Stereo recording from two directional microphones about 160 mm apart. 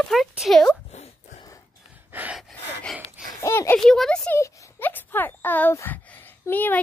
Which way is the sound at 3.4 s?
15° left (ahead or behind).